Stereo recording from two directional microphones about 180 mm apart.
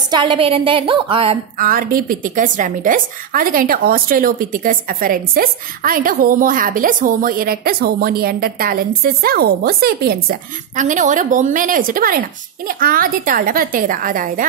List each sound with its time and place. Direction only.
0.1 s a woman's voice: 25° right (ahead or behind)
1.6 s a woman's voice: 50° right (ahead or behind)
10.8 s a woman's voice: 45° right (ahead or behind)